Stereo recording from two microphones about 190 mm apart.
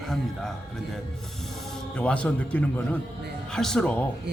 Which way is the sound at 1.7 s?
5° left (ahead or behind).